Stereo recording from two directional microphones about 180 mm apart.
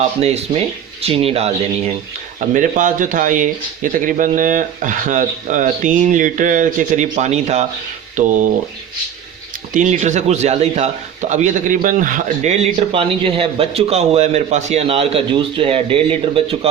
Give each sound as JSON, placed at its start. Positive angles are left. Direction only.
{"t": 0.2, "sound": "a man's voice", "side_deg": -35}
{"t": 2.4, "sound": "speech", "side_deg": -45}
{"t": 9.7, "sound": "a man's voice", "side_deg": -45}
{"t": 12.9, "sound": "a man's voice", "side_deg": -30}